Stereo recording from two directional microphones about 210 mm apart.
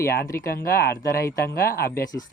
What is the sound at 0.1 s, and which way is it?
Speech, 45° left (ahead or behind).